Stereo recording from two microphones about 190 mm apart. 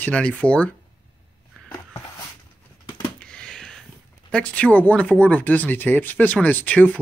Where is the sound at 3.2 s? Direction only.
5° left (ahead or behind).